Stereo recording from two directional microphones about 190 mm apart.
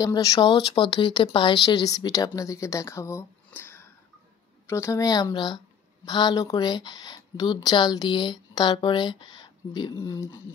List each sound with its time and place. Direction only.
0.0 s speech: 20° left (ahead or behind)